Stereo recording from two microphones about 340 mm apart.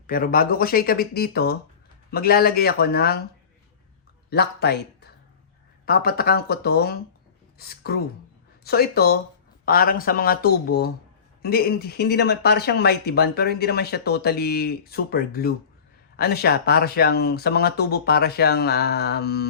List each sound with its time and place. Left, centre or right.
0.1 s speech: left
4.3 s speech: left